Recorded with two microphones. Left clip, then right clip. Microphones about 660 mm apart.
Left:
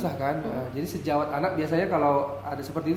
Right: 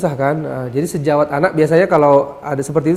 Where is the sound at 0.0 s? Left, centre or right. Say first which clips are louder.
Right 11 dB; right.